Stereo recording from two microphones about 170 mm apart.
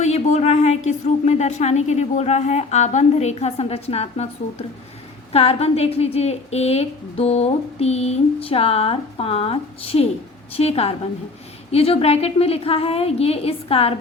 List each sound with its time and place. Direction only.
0.0 s a woman's voice: 40° left (ahead or behind)
5.3 s a woman's voice: 35° left (ahead or behind)